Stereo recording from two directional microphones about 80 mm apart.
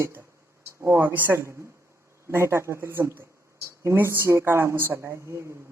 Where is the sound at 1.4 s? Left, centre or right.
Right.